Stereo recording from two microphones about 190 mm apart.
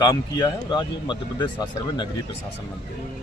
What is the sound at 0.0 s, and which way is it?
Speech, 20° left (ahead or behind).